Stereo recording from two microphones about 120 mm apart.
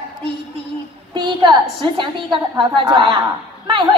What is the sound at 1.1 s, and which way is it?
A man's voice, 40° right (ahead or behind).